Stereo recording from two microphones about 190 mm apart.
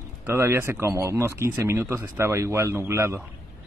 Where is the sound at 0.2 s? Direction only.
15° right (ahead or behind).